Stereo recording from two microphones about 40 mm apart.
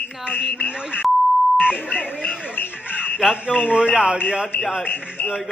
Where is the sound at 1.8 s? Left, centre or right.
Left.